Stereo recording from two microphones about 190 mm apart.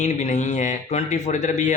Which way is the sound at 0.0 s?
40° left (ahead or behind).